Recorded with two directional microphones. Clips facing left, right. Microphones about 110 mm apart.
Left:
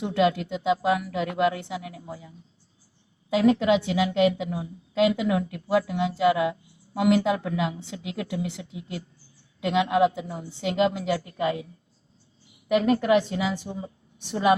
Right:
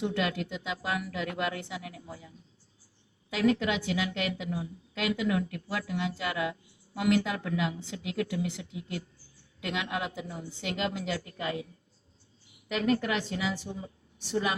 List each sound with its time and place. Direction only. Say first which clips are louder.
0.0 s a woman's voice: left 7 dB; 25° left (ahead or behind)
3.3 s a woman's voice: left 7 dB; 25° left (ahead or behind)
9.6 s a woman's voice: left 12 dB; 25° left (ahead or behind)
12.7 s a woman's voice: left 8 dB; 25° left (ahead or behind)